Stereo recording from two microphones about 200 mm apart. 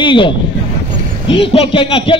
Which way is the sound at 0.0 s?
25° left (ahead or behind).